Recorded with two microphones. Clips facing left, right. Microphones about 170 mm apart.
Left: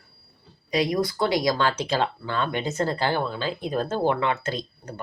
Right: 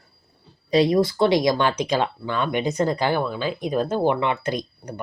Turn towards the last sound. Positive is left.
turn(degrees=-15)  # may be behind; listen again after turning